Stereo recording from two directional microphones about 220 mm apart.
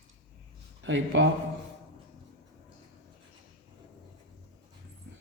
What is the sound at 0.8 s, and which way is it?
Speech, 60° right (ahead or behind).